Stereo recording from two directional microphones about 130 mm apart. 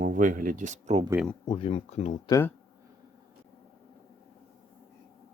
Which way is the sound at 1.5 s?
45° left (ahead or behind).